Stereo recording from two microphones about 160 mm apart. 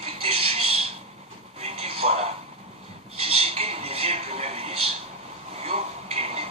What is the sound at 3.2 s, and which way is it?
Television, 35° right (ahead or behind).